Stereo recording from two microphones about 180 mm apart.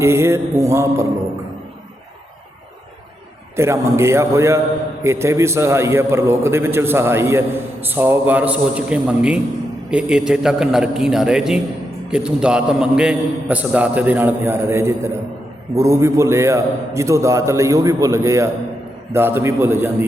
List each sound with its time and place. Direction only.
0.0 s a man's voice: 15° right (ahead or behind)
3.5 s a man's voice: 15° right (ahead or behind)